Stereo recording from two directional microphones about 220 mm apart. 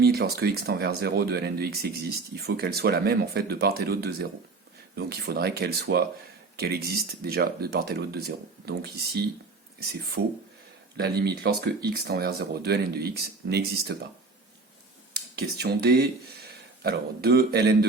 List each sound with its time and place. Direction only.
0.0 s speech: 45° right (ahead or behind)
10.9 s speech: 45° right (ahead or behind)
15.4 s speech: 45° right (ahead or behind)